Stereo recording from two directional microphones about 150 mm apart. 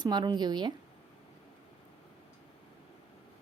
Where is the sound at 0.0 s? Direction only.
30° right (ahead or behind).